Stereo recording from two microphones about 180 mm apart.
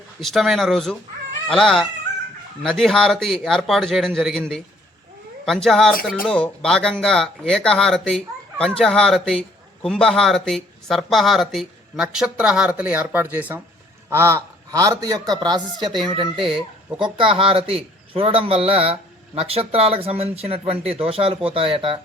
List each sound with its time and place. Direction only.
0.2 s a man's voice: centre (ahead or behind); by 22.0 s 30° right (ahead or behind)